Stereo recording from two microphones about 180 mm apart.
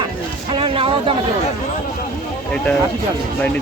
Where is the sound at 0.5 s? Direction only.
30° right (ahead or behind).